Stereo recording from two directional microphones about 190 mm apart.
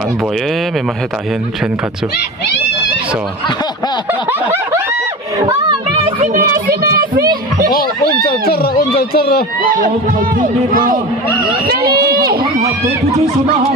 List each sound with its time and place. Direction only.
4.3 s snicker: 10° right (ahead or behind)
6.1 s speech: 45° right (ahead or behind)
8.2 s speech: 55° left (ahead or behind)
9.6 s speech: 45° right (ahead or behind)
11.7 s a sound: 55° right (ahead or behind)